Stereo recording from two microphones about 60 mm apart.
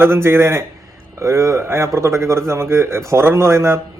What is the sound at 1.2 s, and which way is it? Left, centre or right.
A man's voice, right.